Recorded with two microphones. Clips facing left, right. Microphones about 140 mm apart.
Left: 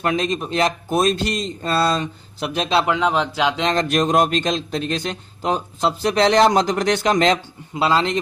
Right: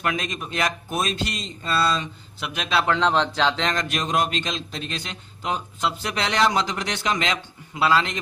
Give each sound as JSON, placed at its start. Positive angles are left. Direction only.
{"t": 0.0, "sound": "a man's voice", "side_deg": 30}
{"t": 2.5, "sound": "a man's voice", "side_deg": 30}
{"t": 2.9, "sound": "speech", "side_deg": 10}
{"t": 3.8, "sound": "speech", "side_deg": 45}
{"t": 7.7, "sound": "a man's voice", "side_deg": 25}